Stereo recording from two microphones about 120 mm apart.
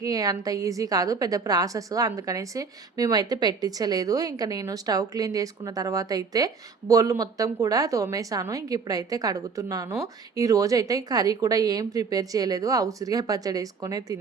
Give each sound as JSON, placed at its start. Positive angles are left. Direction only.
{"t": 0.0, "sound": "a woman's voice", "side_deg": -30}